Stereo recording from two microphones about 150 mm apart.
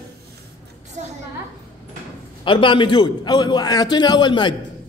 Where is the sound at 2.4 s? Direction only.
35° left (ahead or behind).